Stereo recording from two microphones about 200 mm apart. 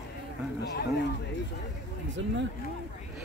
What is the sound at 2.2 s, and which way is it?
Speech, 70° right (ahead or behind).